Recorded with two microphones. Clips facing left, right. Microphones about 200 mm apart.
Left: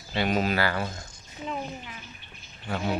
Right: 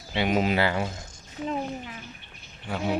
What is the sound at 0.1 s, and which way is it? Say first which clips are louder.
Speech: right 2 dB; 15° right (ahead or behind).